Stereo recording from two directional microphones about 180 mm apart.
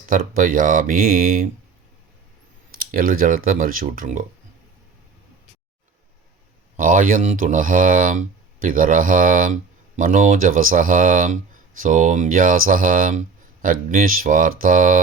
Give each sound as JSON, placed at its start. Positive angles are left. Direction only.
{"t": 0.0, "sound": "speech", "side_deg": -50}
{"t": 2.7, "sound": "speech", "side_deg": -50}
{"t": 6.7, "sound": "speech", "side_deg": -50}